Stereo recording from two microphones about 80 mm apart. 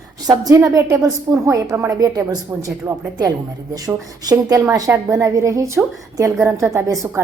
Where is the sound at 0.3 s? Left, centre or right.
Right.